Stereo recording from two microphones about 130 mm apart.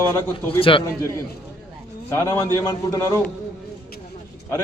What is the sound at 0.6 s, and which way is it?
Speech, 45° left (ahead or behind).